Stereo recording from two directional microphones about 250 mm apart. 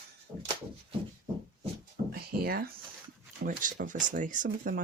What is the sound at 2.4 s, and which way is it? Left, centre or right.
Speech, right.